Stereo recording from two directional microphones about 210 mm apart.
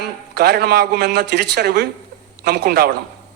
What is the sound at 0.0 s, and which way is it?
A man's voice, 50° right (ahead or behind).